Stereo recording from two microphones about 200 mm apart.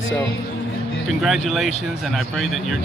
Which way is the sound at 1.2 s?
Centre (ahead or behind).